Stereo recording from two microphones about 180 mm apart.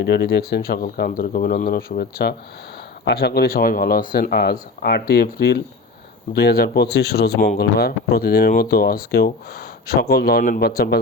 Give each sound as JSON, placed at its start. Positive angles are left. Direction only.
{"t": 0.0, "sound": "speech", "side_deg": 70}
{"t": 3.0, "sound": "speech", "side_deg": 70}